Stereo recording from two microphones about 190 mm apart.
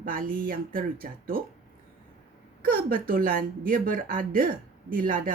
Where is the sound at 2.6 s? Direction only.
50° right (ahead or behind).